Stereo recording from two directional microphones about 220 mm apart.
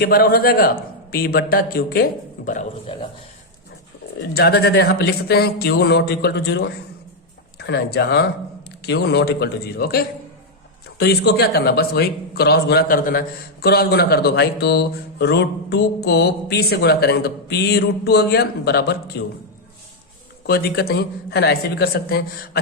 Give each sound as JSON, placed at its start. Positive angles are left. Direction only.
{"t": 0.0, "sound": "a man's voice", "side_deg": 45}
{"t": 2.8, "sound": "speech", "side_deg": 25}
{"t": 4.2, "sound": "a man's voice", "side_deg": 45}
{"t": 20.5, "sound": "a man's voice", "side_deg": 45}